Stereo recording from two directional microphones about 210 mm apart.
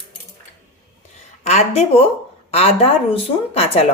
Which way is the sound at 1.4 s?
30° left (ahead or behind).